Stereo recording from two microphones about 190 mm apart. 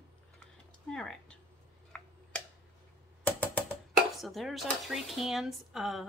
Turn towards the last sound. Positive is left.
turn(degrees=0)  # may be behind; listen again after turning